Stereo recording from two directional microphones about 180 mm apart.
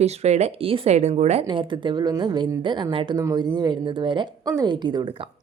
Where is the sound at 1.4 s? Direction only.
25° right (ahead or behind).